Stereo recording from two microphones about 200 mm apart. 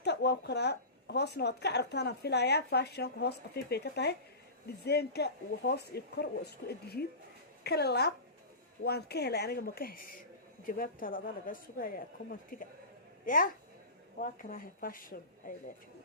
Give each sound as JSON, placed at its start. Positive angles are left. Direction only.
{"t": 0.0, "sound": "speech", "side_deg": 55}